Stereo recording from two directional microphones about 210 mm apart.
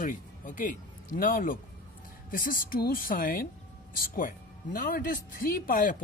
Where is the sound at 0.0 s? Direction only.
40° left (ahead or behind).